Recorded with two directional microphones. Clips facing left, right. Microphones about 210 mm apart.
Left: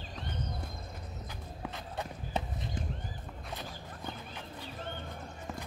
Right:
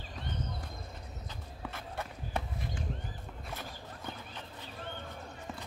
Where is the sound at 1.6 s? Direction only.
20° left (ahead or behind).